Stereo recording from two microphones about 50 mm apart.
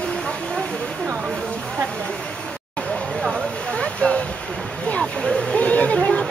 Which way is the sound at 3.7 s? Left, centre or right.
Centre.